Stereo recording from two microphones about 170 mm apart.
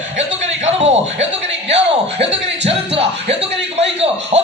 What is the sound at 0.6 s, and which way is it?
Music, 40° right (ahead or behind).